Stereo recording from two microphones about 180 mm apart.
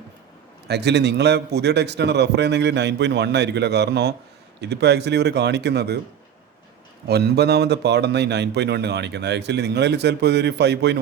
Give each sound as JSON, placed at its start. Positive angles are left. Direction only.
{"t": 0.7, "sound": "a man's voice", "side_deg": -70}
{"t": 7.1, "sound": "a man's voice", "side_deg": -65}